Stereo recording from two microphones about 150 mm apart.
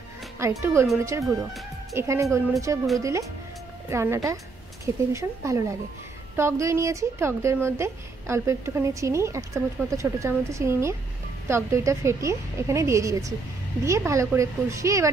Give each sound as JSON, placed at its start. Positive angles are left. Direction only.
{"t": 0.4, "sound": "speech", "side_deg": -20}